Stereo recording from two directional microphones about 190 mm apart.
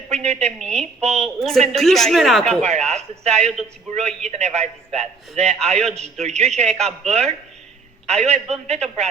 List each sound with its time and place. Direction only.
0.1 s a woman's voice: 35° right (ahead or behind)
0.6 s a woman's voice: 5° left (ahead or behind)
1.0 s a man's voice: 35° right (ahead or behind)
1.4 s a woman's voice: centre (ahead or behind)
2.5 s a man's voice: 35° right (ahead or behind)